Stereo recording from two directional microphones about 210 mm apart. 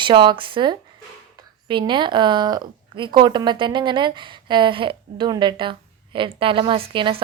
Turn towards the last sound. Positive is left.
turn(degrees=-25)  # may be behind; listen again after turning